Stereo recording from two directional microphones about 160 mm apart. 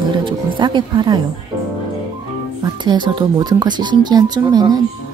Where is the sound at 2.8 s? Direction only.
30° right (ahead or behind).